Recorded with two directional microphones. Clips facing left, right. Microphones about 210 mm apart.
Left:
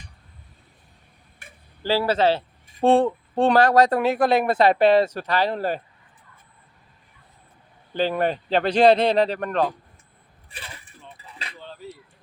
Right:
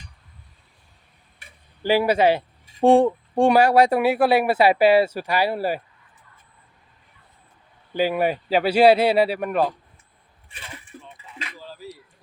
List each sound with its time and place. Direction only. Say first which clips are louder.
1.4 s tick-tock: left 3 dB; 50° left (ahead or behind)
1.8 s speech: right 2 dB; 15° right (ahead or behind)
7.9 s speech: right 1 dB; 10° right (ahead or behind)
10.5 s a sound: even; 35° left (ahead or behind)
11.2 s music: right 2 dB; 35° left (ahead or behind)
11.5 s a sound: left 3 dB; 5° right (ahead or behind)